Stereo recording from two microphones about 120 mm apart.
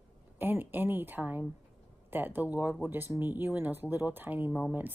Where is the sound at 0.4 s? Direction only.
15° right (ahead or behind).